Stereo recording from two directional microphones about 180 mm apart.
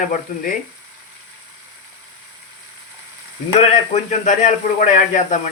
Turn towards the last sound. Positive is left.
turn(degrees=45)  # may be behind; listen again after turning